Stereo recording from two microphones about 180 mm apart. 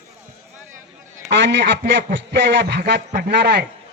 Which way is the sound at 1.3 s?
75° right (ahead or behind).